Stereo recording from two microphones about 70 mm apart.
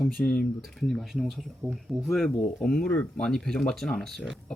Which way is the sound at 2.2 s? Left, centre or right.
Centre.